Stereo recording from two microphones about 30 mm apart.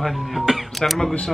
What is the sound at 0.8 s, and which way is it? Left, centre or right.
Speech, centre.